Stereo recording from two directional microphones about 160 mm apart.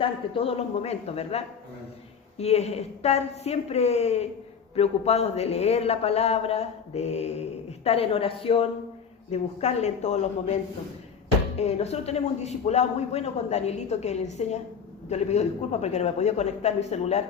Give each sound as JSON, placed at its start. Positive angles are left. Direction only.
{"t": 0.0, "sound": "a man's voice", "side_deg": 35}